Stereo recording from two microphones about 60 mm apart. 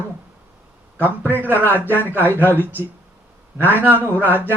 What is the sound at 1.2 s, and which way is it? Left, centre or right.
Speech, right.